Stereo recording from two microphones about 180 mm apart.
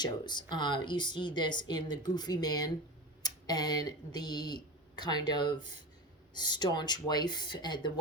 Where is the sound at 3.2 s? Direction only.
20° left (ahead or behind).